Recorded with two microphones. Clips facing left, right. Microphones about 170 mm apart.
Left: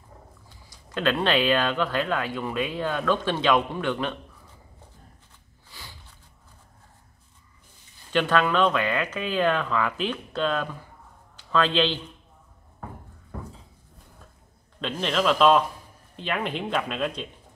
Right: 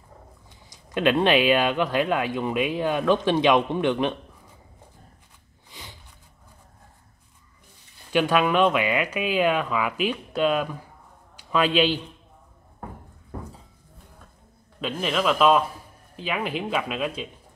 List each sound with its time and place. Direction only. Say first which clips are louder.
0.5 s speech: right 1 dB; 20° right (ahead or behind)
5.7 s a sound: right 2 dB; 20° right (ahead or behind)
8.1 s speech: right 2 dB; 10° right (ahead or behind)
14.8 s speech: even; 5° right (ahead or behind)